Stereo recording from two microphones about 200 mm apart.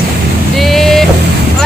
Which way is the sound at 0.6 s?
Centre (ahead or behind).